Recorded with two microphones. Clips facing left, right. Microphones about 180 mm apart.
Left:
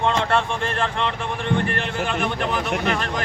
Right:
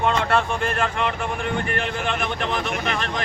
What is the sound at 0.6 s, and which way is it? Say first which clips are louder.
Speech: right 1 dB; 30° left (ahead or behind).